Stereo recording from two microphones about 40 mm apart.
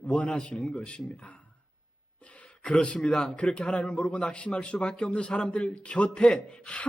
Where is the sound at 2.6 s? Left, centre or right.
Left.